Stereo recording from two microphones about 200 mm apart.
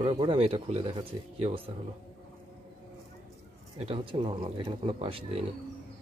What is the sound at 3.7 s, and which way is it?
Speech, 30° right (ahead or behind).